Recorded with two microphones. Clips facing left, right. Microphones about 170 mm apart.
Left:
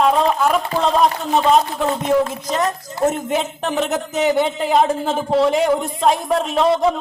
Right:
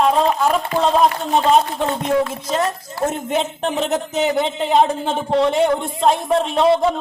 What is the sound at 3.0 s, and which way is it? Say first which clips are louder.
Speech: left 2 dB; centre (ahead or behind).